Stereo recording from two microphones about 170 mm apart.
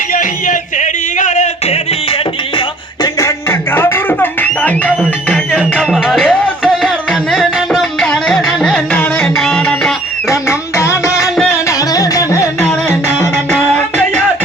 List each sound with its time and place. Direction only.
0.1 s a sound: 50° left (ahead or behind)
2.6 s music: 25° left (ahead or behind); by 9.9 s 5° left (ahead or behind)
10.2 s music: 15° left (ahead or behind)
11.1 s music: centre (ahead or behind)
11.5 s music: 20° left (ahead or behind)